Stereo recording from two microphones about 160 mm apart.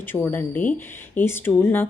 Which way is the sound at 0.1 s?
10° left (ahead or behind).